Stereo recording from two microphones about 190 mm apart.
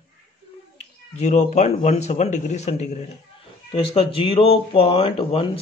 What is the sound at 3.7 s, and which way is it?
Speech, 25° left (ahead or behind).